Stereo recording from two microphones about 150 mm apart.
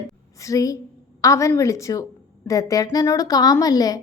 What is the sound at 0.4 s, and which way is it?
A woman's voice, 20° left (ahead or behind).